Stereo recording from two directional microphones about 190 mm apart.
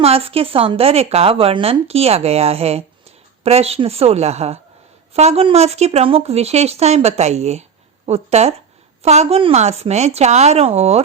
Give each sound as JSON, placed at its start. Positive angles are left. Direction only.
{"t": 0.0, "sound": "speech", "side_deg": -30}